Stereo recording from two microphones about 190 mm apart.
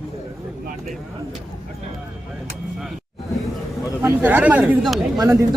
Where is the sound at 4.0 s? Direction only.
10° right (ahead or behind).